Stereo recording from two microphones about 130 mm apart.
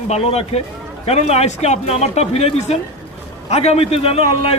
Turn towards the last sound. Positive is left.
turn(degrees=50)  # may be behind; listen again after turning